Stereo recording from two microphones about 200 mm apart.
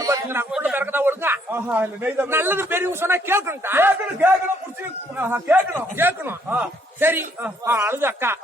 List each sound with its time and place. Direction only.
0.0 s a man's voice: 15° right (ahead or behind)